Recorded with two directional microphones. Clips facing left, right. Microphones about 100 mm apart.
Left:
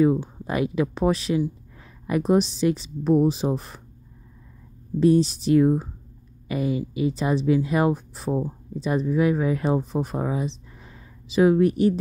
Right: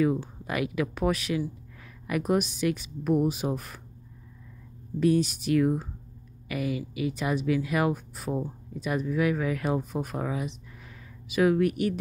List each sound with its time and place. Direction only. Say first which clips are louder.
0.0 s speech: left 5 dB; 25° left (ahead or behind)
5.0 s speech: left 5 dB; 30° left (ahead or behind)